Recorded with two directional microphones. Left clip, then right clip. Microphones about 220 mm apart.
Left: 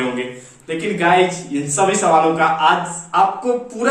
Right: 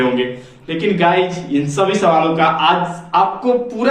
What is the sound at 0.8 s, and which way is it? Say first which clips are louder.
A man's voice: right 1 dB; 15° left (ahead or behind).